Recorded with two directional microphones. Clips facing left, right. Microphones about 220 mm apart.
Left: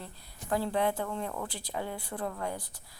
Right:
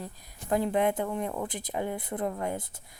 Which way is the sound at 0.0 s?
20° right (ahead or behind).